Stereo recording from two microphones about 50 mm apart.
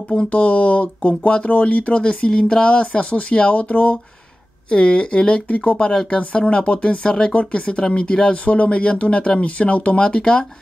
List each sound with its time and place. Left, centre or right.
0.1 s speech: left